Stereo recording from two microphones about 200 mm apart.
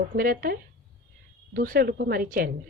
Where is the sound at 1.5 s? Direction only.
45° right (ahead or behind).